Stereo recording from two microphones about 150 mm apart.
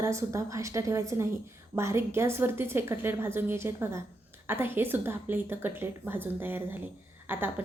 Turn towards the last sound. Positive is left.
turn(degrees=-15)  # may be behind; listen again after turning